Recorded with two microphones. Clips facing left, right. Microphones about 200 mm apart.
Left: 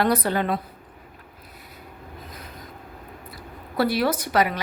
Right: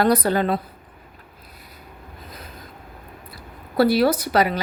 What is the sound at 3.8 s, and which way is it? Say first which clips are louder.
Speech: right 5 dB; 35° right (ahead or behind).